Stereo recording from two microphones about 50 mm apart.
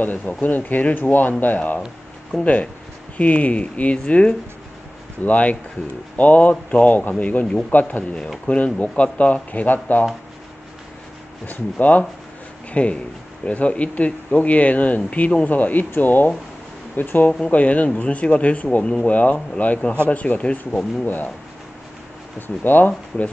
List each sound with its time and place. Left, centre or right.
0.0 s speech: left; by 4.4 s centre
5.2 s speech: left
8.5 s speech: left
11.4 s speech: left
17.5 s speech: left
22.6 s speech: left